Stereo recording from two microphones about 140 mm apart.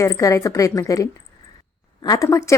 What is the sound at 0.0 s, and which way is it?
Speech, 20° left (ahead or behind).